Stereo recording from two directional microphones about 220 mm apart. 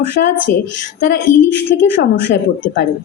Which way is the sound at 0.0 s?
50° left (ahead or behind).